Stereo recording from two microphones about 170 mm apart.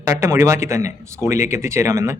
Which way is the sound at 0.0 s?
15° right (ahead or behind).